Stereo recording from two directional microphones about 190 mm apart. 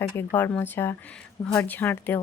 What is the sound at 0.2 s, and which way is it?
A woman's voice, 10° left (ahead or behind).